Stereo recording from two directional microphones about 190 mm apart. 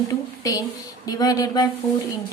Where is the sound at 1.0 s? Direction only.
20° left (ahead or behind).